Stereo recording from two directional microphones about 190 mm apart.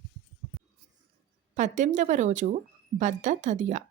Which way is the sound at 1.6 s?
40° right (ahead or behind).